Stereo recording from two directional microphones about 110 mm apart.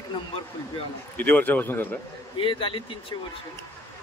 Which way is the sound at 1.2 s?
15° left (ahead or behind).